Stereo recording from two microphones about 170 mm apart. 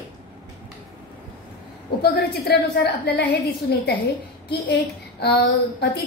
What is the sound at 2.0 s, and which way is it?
A woman's voice, 70° left (ahead or behind).